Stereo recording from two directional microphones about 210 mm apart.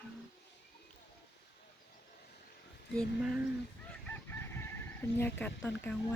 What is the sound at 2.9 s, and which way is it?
Speech, centre (ahead or behind).